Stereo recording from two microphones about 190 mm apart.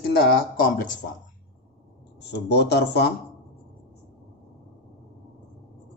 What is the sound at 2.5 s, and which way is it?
Speech, 60° left (ahead or behind).